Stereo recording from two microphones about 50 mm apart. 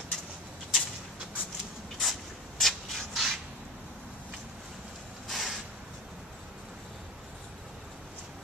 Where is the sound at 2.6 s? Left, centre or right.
Centre.